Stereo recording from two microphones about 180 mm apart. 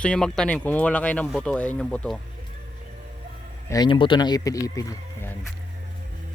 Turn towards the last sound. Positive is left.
turn(degrees=15)  # may be behind; listen again after turning